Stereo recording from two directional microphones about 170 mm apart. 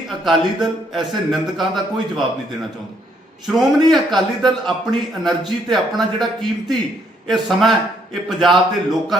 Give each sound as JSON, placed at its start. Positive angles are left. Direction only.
{"t": 0.3, "sound": "a man's voice", "side_deg": 0}
{"t": 3.4, "sound": "a man's voice", "side_deg": 0}